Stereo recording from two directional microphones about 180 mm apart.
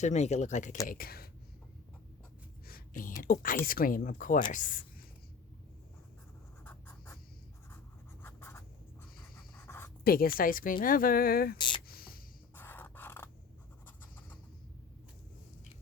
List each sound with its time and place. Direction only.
0.0 s speech: 40° left (ahead or behind)
0.9 s speech: 55° left (ahead or behind)
2.6 s a sound: 50° left (ahead or behind)
3.3 s speech: 50° left (ahead or behind)
6.7 s writing: 10° left (ahead or behind)
8.2 s scratch: 15° left (ahead or behind)
9.6 s writing: 10° left (ahead or behind)
10.0 s speech: 55° left (ahead or behind)
11.5 s speech: 25° left (ahead or behind)
11.9 s a sound: 55° left (ahead or behind)
12.5 s scissors: 10° left (ahead or behind)